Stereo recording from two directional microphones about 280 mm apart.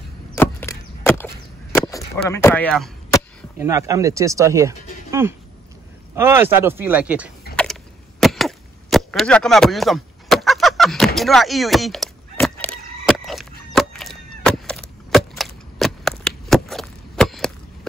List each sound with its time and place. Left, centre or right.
0.3 s wood: centre
1.7 s chop: centre
3.5 s speech: centre
6.1 s speech: centre
7.5 s a sound: left
8.2 s chop: centre